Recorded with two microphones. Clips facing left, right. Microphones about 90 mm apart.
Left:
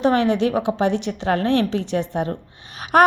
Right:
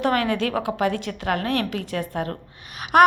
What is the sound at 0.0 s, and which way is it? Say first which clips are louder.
A woman's voice: left 4 dB; 25° left (ahead or behind).